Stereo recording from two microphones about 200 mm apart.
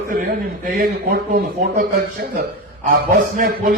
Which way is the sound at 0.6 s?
45° right (ahead or behind).